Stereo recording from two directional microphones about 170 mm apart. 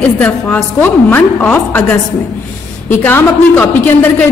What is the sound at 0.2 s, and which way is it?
A man's voice, 10° left (ahead or behind).